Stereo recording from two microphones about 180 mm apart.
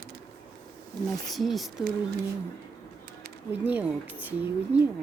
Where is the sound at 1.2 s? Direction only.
Centre (ahead or behind).